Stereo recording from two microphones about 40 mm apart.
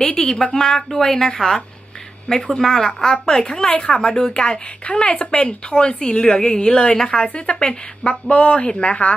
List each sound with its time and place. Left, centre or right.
0.0 s a woman's voice: left
2.5 s a woman's voice: centre
5.0 s a woman's voice: left
7.2 s a woman's voice: left